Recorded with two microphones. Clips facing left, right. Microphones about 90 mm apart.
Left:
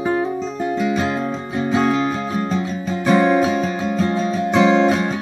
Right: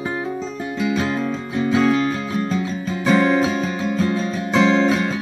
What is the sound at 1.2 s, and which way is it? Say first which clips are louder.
Music: even; 25° left (ahead or behind).